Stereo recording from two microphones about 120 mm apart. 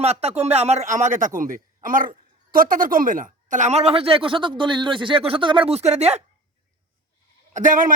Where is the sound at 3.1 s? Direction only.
90° right; by 5.7 s 45° right (ahead or behind).